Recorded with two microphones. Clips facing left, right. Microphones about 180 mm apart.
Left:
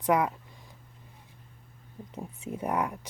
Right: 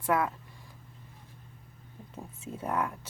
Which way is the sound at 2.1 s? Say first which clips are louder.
Left 4 dB; 15° left (ahead or behind).